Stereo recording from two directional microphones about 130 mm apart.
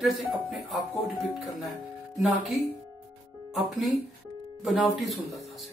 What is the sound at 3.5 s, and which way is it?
Speech, centre (ahead or behind).